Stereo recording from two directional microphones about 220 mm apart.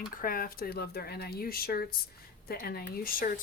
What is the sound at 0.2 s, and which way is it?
Speech, 40° left (ahead or behind).